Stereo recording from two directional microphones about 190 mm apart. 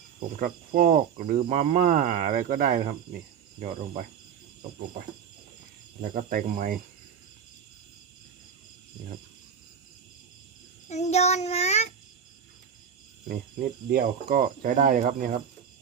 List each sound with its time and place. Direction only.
0.2 s speech: 45° right (ahead or behind)
6.0 s speech: 45° right (ahead or behind)
10.8 s child singing: 35° left (ahead or behind)
13.9 s speech: 50° right (ahead or behind)